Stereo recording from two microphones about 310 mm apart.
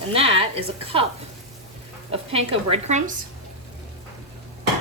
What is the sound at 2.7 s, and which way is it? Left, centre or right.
Speech, right.